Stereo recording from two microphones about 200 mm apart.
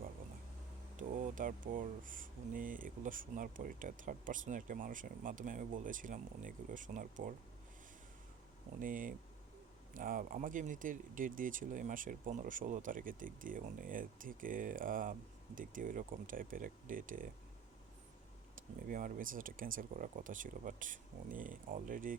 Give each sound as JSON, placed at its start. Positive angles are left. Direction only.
{"t": 0.9, "sound": "speech", "side_deg": -40}
{"t": 8.8, "sound": "speech", "side_deg": -40}
{"t": 18.5, "sound": "speech", "side_deg": -45}